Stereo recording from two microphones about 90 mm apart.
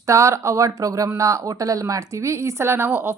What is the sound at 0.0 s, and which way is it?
Speech, 35° right (ahead or behind).